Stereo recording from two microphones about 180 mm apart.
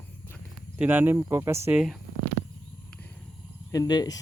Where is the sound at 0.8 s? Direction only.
10° right (ahead or behind).